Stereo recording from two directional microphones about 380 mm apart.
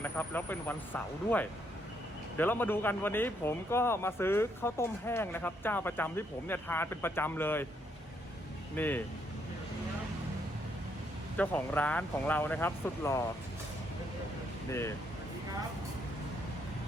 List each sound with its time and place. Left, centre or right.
0.0 s speech: centre
8.7 s speech: centre
11.3 s speech: centre
14.7 s speech: centre